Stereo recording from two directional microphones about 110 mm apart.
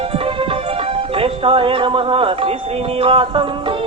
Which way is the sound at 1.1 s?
55° right (ahead or behind).